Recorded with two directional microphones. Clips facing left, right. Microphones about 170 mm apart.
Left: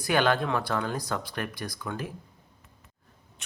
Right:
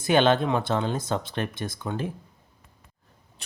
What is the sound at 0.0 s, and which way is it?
Speech, 25° right (ahead or behind).